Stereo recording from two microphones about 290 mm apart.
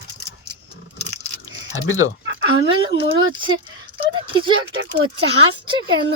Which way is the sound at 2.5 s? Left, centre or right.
Centre.